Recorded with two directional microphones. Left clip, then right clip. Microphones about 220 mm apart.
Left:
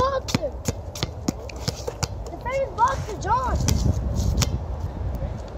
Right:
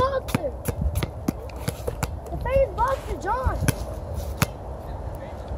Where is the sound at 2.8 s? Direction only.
50° right (ahead or behind).